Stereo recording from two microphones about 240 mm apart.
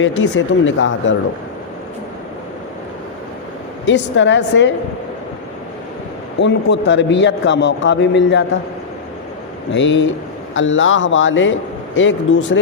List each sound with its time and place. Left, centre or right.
0.0 s speech: left
3.8 s a man's voice: left
6.4 s a man's voice: left
9.7 s a man's voice: left